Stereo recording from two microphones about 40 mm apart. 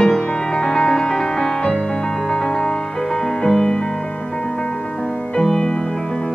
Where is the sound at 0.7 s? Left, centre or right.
Centre.